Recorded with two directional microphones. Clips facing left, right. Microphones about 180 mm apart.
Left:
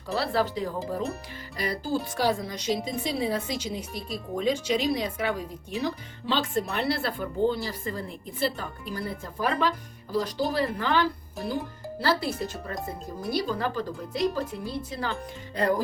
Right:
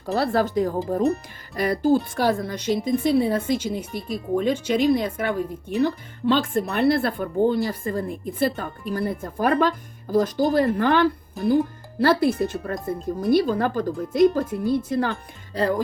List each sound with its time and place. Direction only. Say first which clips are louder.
0.0 s speech: right 5 dB; 45° right (ahead or behind)